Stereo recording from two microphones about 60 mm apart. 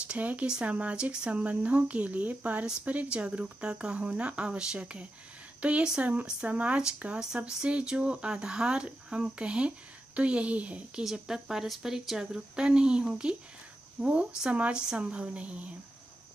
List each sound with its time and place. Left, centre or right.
0.1 s speech: right
11.1 s speech: centre
14.5 s speech: centre